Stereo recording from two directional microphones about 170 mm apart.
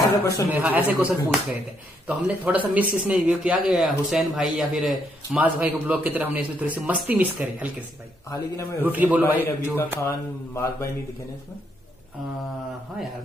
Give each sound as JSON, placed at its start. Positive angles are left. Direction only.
{"t": 0.2, "sound": "mantra", "side_deg": 15}
{"t": 0.5, "sound": "speech", "side_deg": -10}
{"t": 2.0, "sound": "speech", "side_deg": -10}
{"t": 8.3, "sound": "mantra", "side_deg": 20}
{"t": 8.8, "sound": "speech", "side_deg": -10}
{"t": 9.4, "sound": "mantra", "side_deg": 15}